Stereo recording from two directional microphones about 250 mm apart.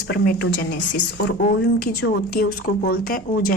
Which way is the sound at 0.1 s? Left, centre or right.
Left.